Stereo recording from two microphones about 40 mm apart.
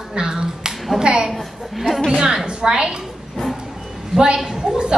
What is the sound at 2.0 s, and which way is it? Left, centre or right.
Speech, centre.